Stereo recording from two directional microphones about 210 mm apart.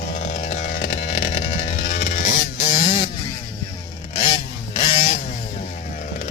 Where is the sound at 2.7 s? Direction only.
30° left (ahead or behind).